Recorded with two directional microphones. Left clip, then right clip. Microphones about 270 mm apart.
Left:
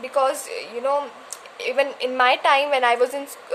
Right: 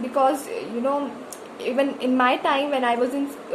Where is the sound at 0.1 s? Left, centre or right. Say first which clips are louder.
Even; left.